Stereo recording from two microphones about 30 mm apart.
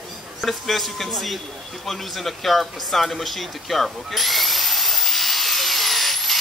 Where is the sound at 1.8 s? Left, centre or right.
Centre.